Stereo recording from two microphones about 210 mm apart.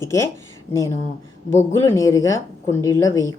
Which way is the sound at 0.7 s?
10° left (ahead or behind).